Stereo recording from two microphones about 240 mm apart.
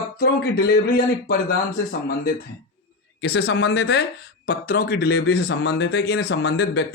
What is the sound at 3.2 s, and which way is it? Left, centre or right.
Speech, left.